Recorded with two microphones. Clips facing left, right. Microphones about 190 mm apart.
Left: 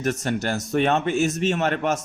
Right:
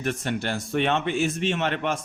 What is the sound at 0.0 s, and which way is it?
Speech, 45° left (ahead or behind).